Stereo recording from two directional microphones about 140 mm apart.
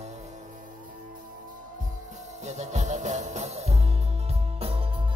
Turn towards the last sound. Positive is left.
turn(degrees=-40)  # may be behind; listen again after turning